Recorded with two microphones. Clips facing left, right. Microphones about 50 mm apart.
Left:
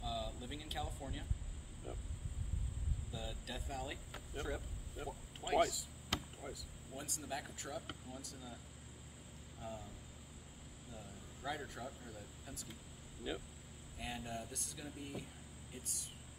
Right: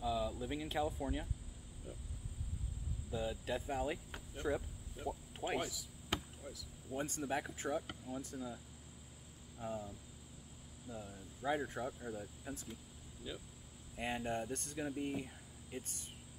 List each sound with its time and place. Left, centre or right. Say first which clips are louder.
0.0 s speech: right 6 dB; right
1.9 s speech: left 2 dB; left
3.1 s speech: right 9 dB; right
4.5 s speech: right 7 dB; centre
4.9 s speech: right 4 dB; centre
6.1 s basketball bounce: right 1 dB; right
6.9 s speech: right 7 dB; right
9.6 s cricket: right 5 dB; right
10.9 s speech: right 6 dB; right
13.2 s speech: left 4 dB; centre
13.9 s speech: right 6 dB; right